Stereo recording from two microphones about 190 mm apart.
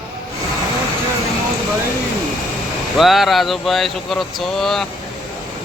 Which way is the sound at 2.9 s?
Centre (ahead or behind).